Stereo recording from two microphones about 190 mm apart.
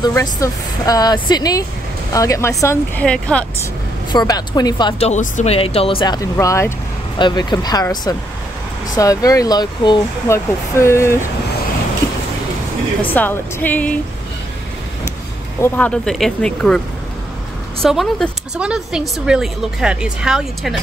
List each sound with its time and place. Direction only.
0.0 s speech: 20° left (ahead or behind)
4.1 s speech: 20° left (ahead or behind)
13.1 s speech: 10° left (ahead or behind)
15.6 s speech: 5° left (ahead or behind)
17.8 s speech: centre (ahead or behind)